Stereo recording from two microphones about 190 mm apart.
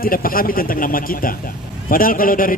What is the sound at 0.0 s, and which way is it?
A man's voice, 50° left (ahead or behind).